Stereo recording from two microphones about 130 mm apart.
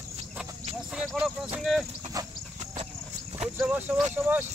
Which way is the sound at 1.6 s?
Centre (ahead or behind).